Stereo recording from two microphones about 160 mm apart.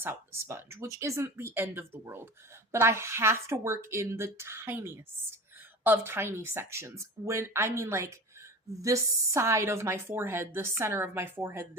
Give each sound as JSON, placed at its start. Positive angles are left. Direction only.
{"t": 0.0, "sound": "speech", "side_deg": -15}